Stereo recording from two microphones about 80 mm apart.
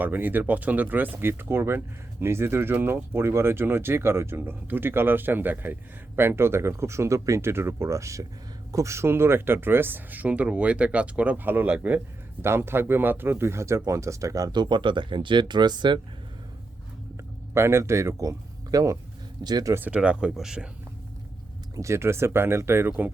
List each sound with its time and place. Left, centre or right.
0.0 s speech: right
12.4 s speech: right
14.5 s speech: right
17.5 s speech: right
19.5 s speech: right
19.7 s speech: right
20.0 s speech: centre
21.8 s speech: right